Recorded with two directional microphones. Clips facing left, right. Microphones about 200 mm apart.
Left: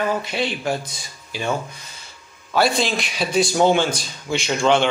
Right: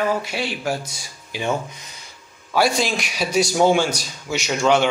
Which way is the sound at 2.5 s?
10° right (ahead or behind).